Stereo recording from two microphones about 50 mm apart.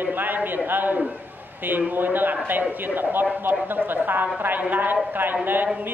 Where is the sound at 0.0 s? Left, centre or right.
Right.